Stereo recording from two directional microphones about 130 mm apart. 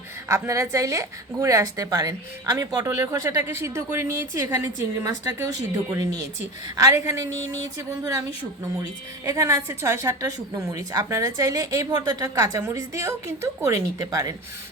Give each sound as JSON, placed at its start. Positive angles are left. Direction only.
{"t": 0.3, "sound": "a woman's voice", "side_deg": -20}